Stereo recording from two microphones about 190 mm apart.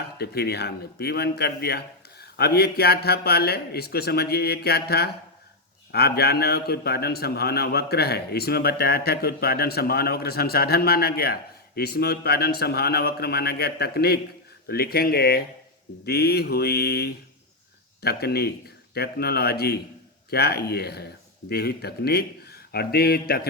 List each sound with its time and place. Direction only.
0.2 s a man's voice: 60° left (ahead or behind)